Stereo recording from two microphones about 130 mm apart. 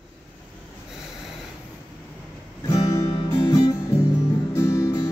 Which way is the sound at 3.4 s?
25° left (ahead or behind).